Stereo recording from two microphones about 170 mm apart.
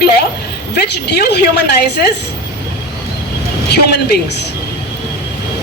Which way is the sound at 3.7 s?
70° left (ahead or behind).